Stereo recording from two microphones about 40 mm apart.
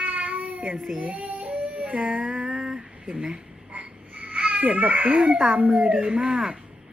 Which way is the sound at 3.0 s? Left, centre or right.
Right.